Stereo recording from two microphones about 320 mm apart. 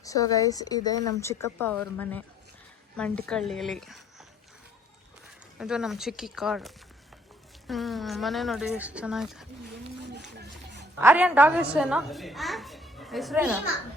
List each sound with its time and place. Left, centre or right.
0.0 s a child's voice: centre
5.5 s a child's voice: centre
10.0 s a sound: right
10.3 s children playing: right
11.0 s a child's voice: centre